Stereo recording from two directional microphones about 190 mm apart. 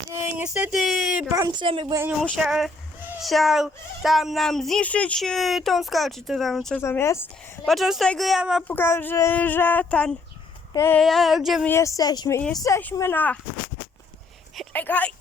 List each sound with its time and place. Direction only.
0.1 s speech: 10° right (ahead or behind)
1.3 s a woman's voice: 20° right (ahead or behind)
2.3 s speech: 5° right (ahead or behind)
6.8 s speech: 15° left (ahead or behind)
7.6 s speech: centre (ahead or behind)
8.6 s speech: 10° left (ahead or behind)
11.0 s speech: centre (ahead or behind)
11.7 s speech: 15° left (ahead or behind)
14.5 s a sound: 5° left (ahead or behind)